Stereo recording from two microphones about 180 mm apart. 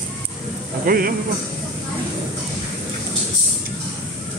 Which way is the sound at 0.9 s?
50° right (ahead or behind).